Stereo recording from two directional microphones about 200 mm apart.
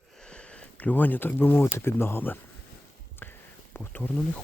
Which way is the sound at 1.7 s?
10° left (ahead or behind).